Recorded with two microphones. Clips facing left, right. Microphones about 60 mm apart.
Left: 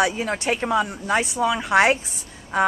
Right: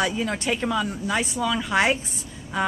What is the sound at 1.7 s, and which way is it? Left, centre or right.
Speech, left.